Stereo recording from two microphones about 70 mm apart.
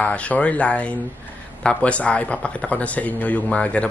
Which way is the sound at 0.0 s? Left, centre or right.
Centre.